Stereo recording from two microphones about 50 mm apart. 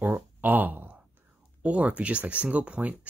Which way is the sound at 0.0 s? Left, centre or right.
Right.